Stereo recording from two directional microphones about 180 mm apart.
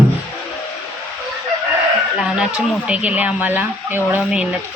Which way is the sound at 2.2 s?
5° right (ahead or behind).